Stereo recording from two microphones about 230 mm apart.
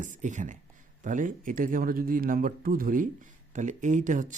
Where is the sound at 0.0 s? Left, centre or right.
Right.